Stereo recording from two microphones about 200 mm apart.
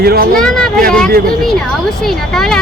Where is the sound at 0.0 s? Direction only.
50° right (ahead or behind).